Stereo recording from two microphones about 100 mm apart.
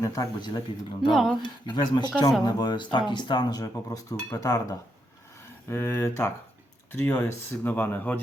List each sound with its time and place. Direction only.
0.0 s speech: 30° left (ahead or behind)
0.4 s speech: 50° left (ahead or behind)
1.1 s speech: centre (ahead or behind)
1.4 s speech: 50° left (ahead or behind); by 8.2 s 15° left (ahead or behind)